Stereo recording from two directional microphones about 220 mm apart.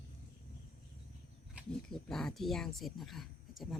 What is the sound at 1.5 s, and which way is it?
Speech, centre (ahead or behind).